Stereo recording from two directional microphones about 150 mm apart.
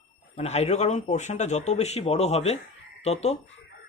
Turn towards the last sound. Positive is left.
turn(degrees=45)  # may be behind; listen again after turning